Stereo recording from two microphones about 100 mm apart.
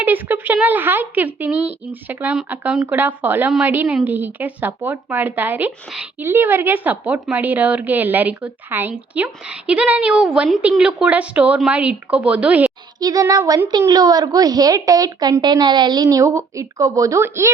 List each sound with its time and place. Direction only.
0.0 s a woman's voice: 20° right (ahead or behind)
13.0 s a woman's voice: 40° right (ahead or behind)